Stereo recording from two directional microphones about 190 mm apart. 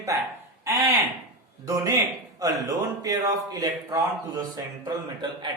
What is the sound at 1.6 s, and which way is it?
A man's voice, 15° right (ahead or behind).